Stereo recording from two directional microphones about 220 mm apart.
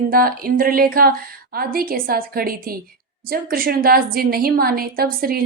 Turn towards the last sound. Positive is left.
turn(degrees=-45)  # may be behind; listen again after turning